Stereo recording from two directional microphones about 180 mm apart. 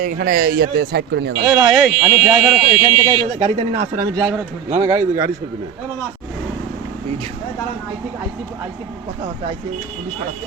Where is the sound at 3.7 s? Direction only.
55° right (ahead or behind).